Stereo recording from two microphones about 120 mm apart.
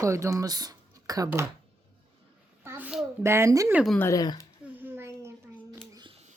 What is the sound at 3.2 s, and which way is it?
Speech, 20° right (ahead or behind).